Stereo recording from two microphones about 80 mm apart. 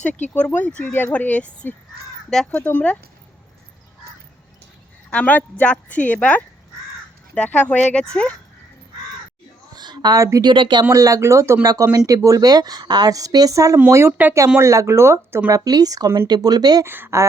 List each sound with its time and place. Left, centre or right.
0.1 s speech: centre
5.1 s speech: centre
9.7 s a sound: right
10.2 s a woman's voice: right
10.4 s speech: right
10.9 s speech: right
11.6 s a woman's voice: right
14.2 s speech: right
14.6 s speech: right
15.4 s a woman's voice: right
16.8 s speech: right